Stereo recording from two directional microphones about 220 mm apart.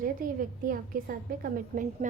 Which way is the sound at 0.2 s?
40° right (ahead or behind).